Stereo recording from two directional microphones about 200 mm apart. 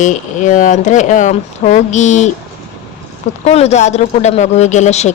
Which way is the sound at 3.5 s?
30° left (ahead or behind).